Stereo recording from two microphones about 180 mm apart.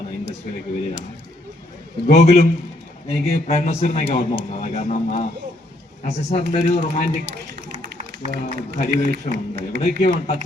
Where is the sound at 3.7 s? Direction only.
35° left (ahead or behind).